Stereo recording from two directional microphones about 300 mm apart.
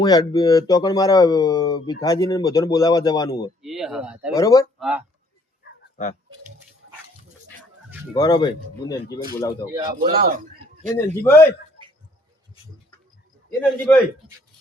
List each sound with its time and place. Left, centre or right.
0.0 s speech: centre
3.6 s speech: centre
4.4 s speech: centre
4.8 s speech: centre
5.6 s a sound: left
8.1 s speech: centre
9.9 s a man's voice: right
10.9 s speech: centre
13.6 s speech: centre